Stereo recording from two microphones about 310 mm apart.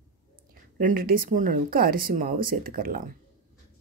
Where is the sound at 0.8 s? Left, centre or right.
Right.